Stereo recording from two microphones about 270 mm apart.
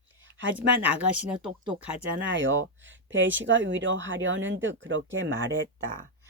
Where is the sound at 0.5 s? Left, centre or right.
Centre.